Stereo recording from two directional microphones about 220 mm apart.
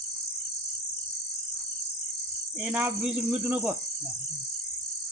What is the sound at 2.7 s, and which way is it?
A man's voice, 5° right (ahead or behind).